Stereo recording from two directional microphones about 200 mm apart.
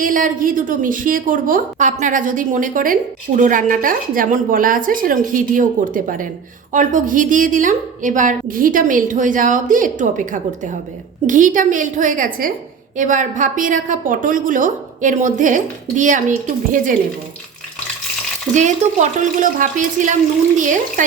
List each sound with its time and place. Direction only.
0.0 s a woman's voice: 40° right (ahead or behind)
18.5 s a woman's voice: 40° right (ahead or behind)